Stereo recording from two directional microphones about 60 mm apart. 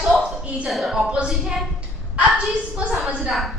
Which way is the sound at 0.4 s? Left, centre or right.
Right.